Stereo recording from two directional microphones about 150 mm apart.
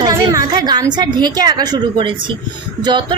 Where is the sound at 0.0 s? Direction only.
25° right (ahead or behind).